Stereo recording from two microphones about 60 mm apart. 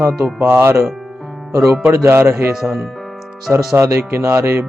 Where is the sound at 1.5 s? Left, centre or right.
Right.